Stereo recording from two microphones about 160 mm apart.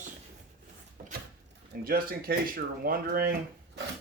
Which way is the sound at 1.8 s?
65° right (ahead or behind).